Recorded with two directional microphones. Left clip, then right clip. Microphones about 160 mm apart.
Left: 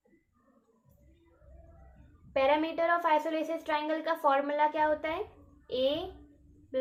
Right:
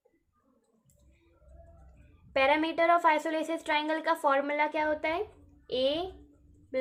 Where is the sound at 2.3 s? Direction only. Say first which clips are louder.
Right 1 dB; 45° right (ahead or behind).